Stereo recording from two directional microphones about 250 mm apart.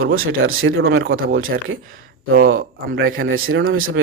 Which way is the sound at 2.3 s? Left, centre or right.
Right.